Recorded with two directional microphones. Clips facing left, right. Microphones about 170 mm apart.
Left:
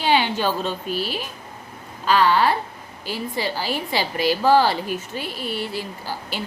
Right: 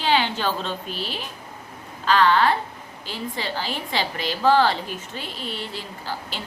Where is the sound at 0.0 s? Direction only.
15° left (ahead or behind).